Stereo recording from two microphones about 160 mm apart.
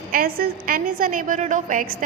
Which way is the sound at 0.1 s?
65° right (ahead or behind).